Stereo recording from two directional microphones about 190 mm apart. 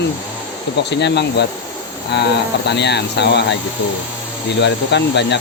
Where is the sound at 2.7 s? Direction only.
60° left (ahead or behind).